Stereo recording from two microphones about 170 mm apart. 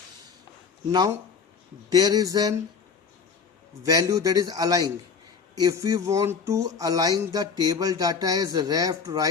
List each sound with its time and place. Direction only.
0.9 s speech: 20° right (ahead or behind)
3.8 s speech: 20° right (ahead or behind)